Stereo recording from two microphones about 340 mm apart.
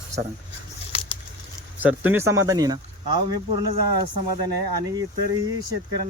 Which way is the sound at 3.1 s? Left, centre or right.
Right.